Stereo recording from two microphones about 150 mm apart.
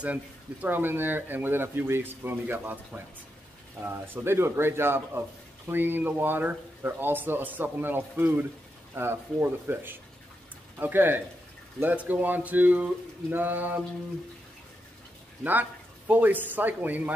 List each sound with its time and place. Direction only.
0.0 s speech: 10° right (ahead or behind)
3.8 s speech: 15° right (ahead or behind)
15.4 s speech: 10° right (ahead or behind)